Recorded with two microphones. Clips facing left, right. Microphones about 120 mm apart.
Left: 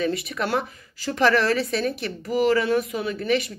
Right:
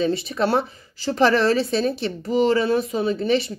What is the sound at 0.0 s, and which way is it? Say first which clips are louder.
A woman's voice: right 4 dB; 30° right (ahead or behind).